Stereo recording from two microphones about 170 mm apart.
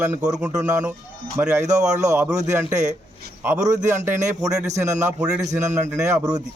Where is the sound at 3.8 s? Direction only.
45° right (ahead or behind).